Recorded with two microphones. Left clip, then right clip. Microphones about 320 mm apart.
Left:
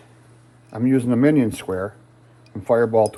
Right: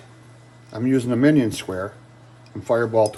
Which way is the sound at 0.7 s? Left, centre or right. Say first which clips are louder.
Left 1 dB; centre.